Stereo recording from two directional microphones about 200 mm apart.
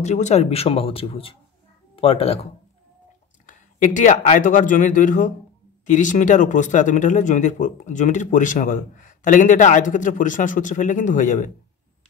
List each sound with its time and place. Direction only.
0.0 s speech: 35° left (ahead or behind)
3.4 s speech: 40° left (ahead or behind)